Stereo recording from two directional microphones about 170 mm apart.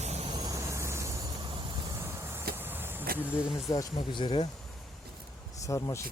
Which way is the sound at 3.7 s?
25° left (ahead or behind).